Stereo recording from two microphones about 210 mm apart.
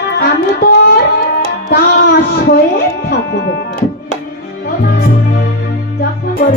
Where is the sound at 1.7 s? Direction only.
45° left (ahead or behind).